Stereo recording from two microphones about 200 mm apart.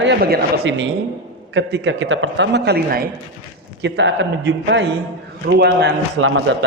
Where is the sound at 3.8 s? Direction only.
65° right (ahead or behind).